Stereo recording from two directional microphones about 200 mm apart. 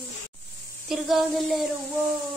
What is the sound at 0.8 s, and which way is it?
Speech, centre (ahead or behind).